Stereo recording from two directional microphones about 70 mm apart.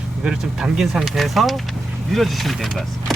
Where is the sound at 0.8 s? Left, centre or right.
Centre.